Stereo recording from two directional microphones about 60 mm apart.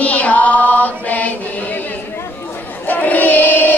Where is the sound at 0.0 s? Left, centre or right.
Left.